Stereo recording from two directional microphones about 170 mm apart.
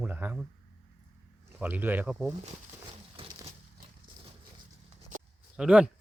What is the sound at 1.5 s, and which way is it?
Speech, 10° right (ahead or behind).